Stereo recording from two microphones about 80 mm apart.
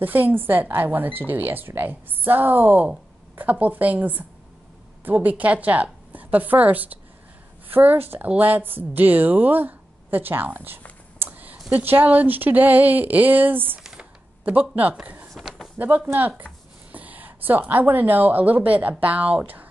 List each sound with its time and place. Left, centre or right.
0.0 s a woman's voice: right
11.1 s a sound: right
11.7 s speech: right